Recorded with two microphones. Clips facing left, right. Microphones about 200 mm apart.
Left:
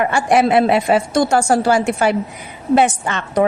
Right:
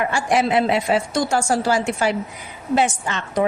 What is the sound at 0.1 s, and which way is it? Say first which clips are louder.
A woman's voice: left 5 dB; 60° left (ahead or behind).